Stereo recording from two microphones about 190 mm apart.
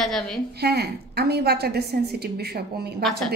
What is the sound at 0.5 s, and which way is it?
A woman's voice, 60° right (ahead or behind).